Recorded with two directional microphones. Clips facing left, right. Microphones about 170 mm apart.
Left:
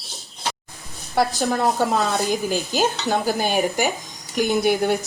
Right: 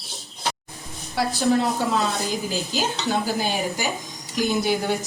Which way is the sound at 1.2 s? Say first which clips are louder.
Left 5 dB; 50° left (ahead or behind).